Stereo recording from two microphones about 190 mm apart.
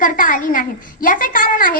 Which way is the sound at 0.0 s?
45° left (ahead or behind).